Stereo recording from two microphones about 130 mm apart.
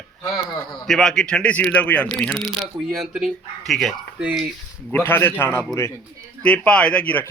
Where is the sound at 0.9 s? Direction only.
5° left (ahead or behind).